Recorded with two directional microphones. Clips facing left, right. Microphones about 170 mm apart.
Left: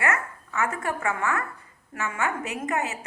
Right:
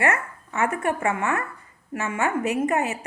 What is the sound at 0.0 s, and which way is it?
A woman's voice, 30° right (ahead or behind).